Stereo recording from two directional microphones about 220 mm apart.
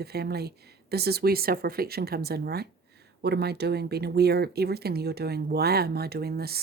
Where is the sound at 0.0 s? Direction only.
45° right (ahead or behind).